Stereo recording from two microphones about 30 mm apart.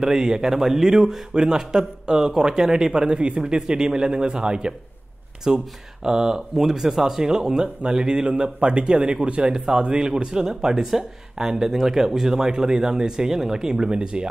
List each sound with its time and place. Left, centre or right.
0.0 s speech: centre
2.9 s speech: right